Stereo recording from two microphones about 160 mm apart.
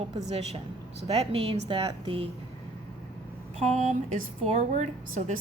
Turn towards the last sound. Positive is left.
turn(degrees=-45)  # may be behind; listen again after turning